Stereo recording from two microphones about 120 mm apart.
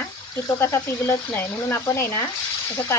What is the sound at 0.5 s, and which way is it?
Speech, 25° left (ahead or behind).